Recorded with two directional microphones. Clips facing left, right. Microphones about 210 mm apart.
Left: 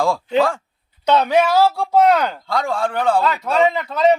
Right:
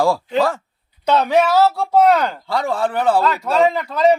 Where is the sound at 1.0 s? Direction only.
5° right (ahead or behind).